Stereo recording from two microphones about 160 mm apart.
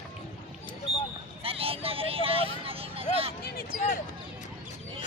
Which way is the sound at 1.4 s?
35° right (ahead or behind).